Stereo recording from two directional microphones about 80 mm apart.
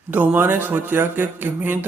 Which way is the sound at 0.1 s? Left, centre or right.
Right.